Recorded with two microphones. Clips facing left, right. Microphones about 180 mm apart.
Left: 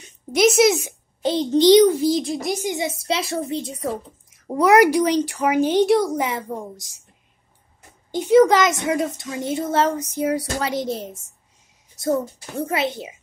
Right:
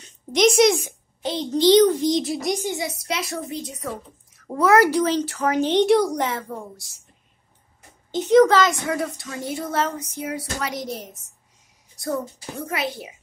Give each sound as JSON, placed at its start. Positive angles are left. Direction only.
{"t": 0.3, "sound": "a woman's voice", "side_deg": 5}
{"t": 2.7, "sound": "a woman's voice", "side_deg": 25}
{"t": 6.2, "sound": "a woman's voice", "side_deg": 15}
{"t": 8.1, "sound": "a woman's voice", "side_deg": 10}
{"t": 9.9, "sound": "a woman's voice", "side_deg": 40}
{"t": 12.6, "sound": "a woman's voice", "side_deg": 25}